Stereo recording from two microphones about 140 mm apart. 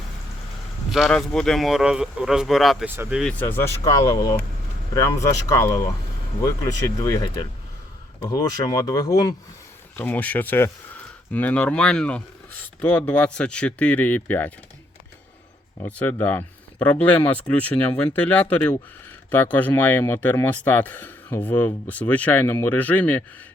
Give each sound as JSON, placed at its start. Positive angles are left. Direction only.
{"t": 0.9, "sound": "speech", "side_deg": 0}
{"t": 2.8, "sound": "speech", "side_deg": -15}
{"t": 3.1, "sound": "speech", "side_deg": -5}
{"t": 3.3, "sound": "speech", "side_deg": 15}
{"t": 4.1, "sound": "speech", "side_deg": 30}
{"t": 10.0, "sound": "speech", "side_deg": 10}
{"t": 15.8, "sound": "speech", "side_deg": 10}